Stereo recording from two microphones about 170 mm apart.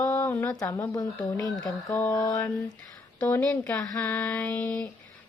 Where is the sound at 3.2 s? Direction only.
5° left (ahead or behind).